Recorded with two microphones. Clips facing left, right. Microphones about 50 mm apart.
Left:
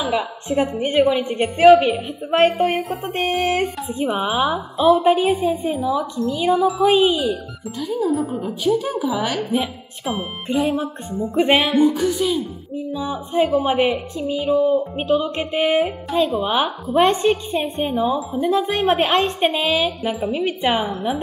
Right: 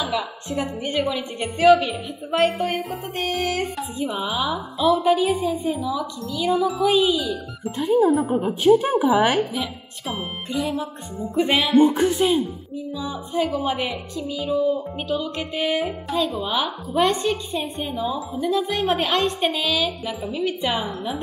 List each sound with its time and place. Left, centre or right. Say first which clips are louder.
0.0 s a woman's voice: left 4 dB; left
2.8 s a woman's voice: left 4 dB; centre
3.1 s speech: left 5 dB; left
5.7 s a woman's voice: left 3 dB; left
7.8 s a woman's voice: right 5 dB; right
8.1 s a woman's voice: right 2 dB; centre
8.6 s a woman's voice: right 4 dB; right
9.5 s speech: left 6 dB; left
11.8 s a woman's voice: even; right
12.7 s a woman's voice: left 5 dB; left
18.0 s a woman's voice: left 5 dB; centre
18.4 s speech: left 3 dB; left